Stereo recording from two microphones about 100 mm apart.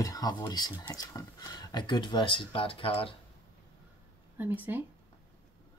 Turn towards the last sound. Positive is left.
turn(degrees=-20)  # may be behind; listen again after turning